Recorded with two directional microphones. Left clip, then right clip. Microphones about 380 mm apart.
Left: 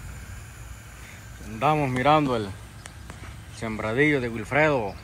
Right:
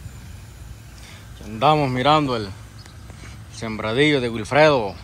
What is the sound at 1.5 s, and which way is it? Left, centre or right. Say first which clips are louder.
Speech: right 5 dB; centre.